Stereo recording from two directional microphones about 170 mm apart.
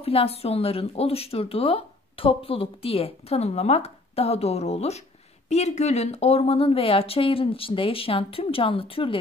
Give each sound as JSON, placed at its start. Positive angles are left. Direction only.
{"t": 0.0, "sound": "speech", "side_deg": 35}